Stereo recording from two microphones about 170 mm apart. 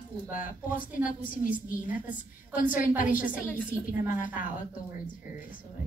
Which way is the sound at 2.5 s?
55° left (ahead or behind).